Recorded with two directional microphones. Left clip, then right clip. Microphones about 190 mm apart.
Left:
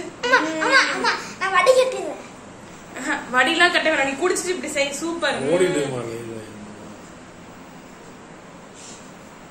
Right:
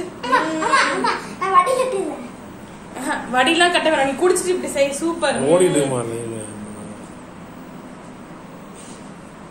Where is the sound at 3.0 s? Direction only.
15° right (ahead or behind).